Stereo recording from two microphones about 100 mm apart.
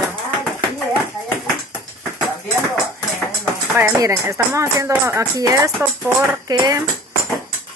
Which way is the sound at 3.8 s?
35° right (ahead or behind).